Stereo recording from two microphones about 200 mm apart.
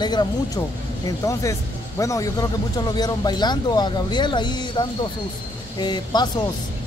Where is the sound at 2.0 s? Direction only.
15° left (ahead or behind).